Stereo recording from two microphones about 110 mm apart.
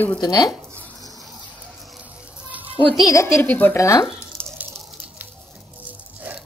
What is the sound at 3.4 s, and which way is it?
Speech, 15° left (ahead or behind).